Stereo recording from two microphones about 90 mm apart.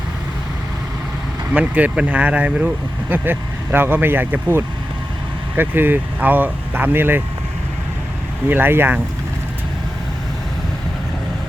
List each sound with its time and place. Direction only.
1.5 s speech: 15° right (ahead or behind)
8.4 s speech: 20° right (ahead or behind)